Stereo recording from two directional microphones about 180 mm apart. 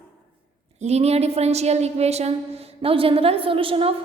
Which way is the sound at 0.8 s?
35° right (ahead or behind).